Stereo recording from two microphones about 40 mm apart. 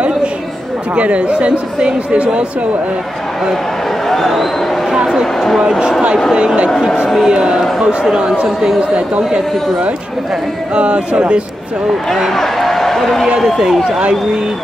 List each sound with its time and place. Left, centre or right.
0.9 s speech: right
4.1 s speech: centre
4.9 s a sound: centre
5.6 s speech: centre
9.3 s speech: right
12.1 s a man's voice: centre
13.9 s speech: right